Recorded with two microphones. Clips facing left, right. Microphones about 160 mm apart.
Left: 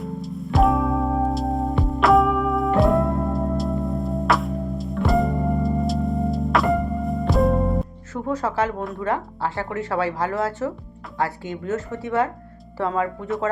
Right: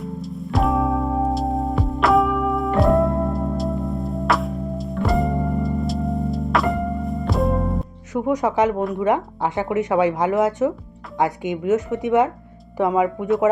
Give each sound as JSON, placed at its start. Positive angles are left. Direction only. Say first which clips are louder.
{"t": 0.0, "sound": "music", "louder": "even", "side_deg": 0}
{"t": 8.1, "sound": "speech", "louder": "right 5 dB", "side_deg": -15}